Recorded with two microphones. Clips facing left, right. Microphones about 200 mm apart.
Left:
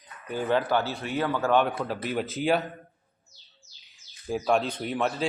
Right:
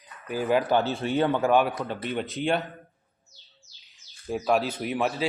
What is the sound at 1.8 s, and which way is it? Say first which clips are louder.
Speech: left 1 dB; 5° left (ahead or behind).